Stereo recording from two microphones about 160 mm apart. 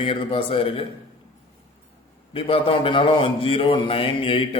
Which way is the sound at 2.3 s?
35° left (ahead or behind).